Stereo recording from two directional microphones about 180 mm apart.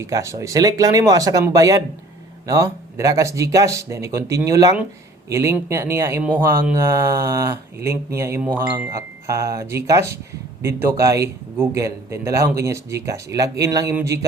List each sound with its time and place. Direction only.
0.0 s speech: 15° right (ahead or behind)